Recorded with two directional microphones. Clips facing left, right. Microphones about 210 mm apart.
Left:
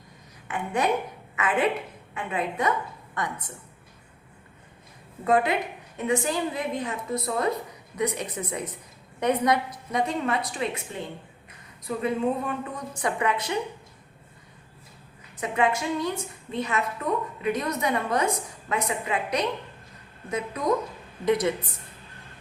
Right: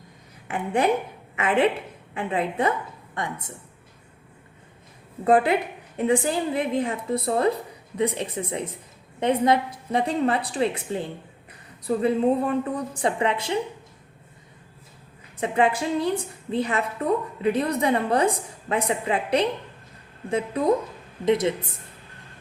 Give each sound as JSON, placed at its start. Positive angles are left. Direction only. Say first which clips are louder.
{"t": 0.4, "sound": "a woman's voice", "louder": "right 4 dB", "side_deg": -30}
{"t": 5.2, "sound": "a woman's voice", "louder": "right 4 dB", "side_deg": -30}
{"t": 15.4, "sound": "a woman's voice", "louder": "right 3 dB", "side_deg": -30}